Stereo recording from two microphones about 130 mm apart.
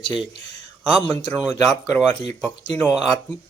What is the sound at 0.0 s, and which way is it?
Speech, 5° right (ahead or behind).